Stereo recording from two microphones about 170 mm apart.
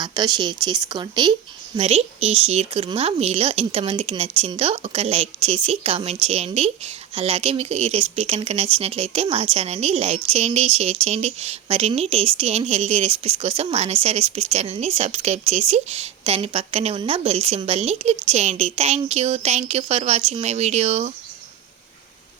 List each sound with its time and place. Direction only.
0.0 s a woman's voice: 25° right (ahead or behind); by 21.1 s 40° right (ahead or behind)